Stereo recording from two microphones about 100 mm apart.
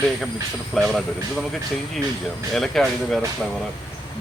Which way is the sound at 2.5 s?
5° left (ahead or behind).